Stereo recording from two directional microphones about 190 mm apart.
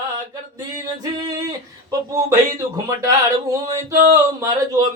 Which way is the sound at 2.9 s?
15° right (ahead or behind).